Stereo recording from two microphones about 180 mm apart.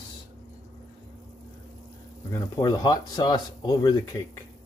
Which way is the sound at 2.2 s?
20° left (ahead or behind).